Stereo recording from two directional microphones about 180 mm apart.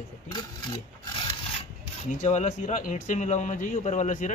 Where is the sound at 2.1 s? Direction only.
40° left (ahead or behind).